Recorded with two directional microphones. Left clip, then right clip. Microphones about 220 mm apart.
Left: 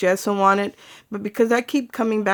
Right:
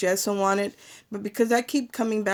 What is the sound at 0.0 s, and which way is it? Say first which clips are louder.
Speech: left 6 dB; 30° left (ahead or behind).